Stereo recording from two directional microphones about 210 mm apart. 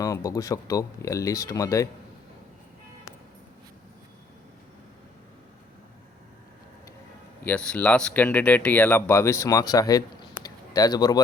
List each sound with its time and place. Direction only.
0.0 s speech: 15° left (ahead or behind)
7.4 s speech: 5° left (ahead or behind)
10.4 s a sound: 20° left (ahead or behind)